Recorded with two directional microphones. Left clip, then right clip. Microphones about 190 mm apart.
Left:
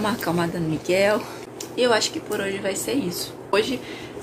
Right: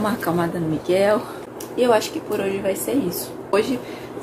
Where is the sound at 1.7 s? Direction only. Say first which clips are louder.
Right 2 dB; 5° left (ahead or behind).